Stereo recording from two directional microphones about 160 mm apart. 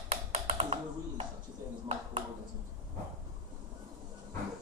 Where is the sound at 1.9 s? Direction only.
35° right (ahead or behind).